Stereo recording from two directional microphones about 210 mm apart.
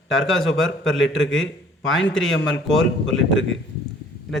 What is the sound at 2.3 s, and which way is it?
Speech, 65° left (ahead or behind).